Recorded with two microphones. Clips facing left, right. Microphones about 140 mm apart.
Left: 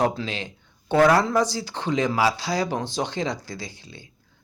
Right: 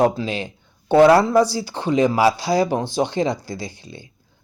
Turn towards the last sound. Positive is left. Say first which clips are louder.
# right 5 dB
turn(degrees=-15)  # may be behind; listen again after turning